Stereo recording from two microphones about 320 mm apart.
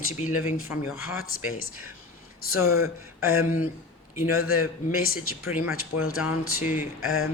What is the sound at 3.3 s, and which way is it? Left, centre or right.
Speech, left.